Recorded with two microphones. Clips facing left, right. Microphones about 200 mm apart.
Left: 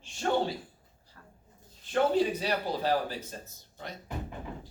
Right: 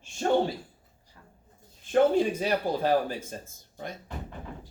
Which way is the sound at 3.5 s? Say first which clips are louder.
Right 4 dB; 50° right (ahead or behind).